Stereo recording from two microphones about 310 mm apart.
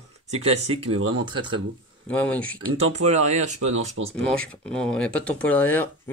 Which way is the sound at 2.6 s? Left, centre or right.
Centre.